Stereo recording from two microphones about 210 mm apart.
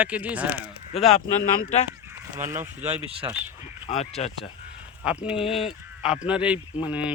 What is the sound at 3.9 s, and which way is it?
Speech, 30° left (ahead or behind).